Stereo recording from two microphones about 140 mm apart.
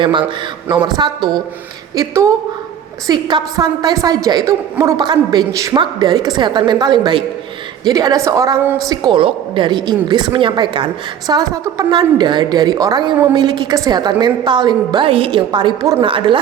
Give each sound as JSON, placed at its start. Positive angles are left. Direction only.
{"t": 0.0, "sound": "a woman's voice", "side_deg": -35}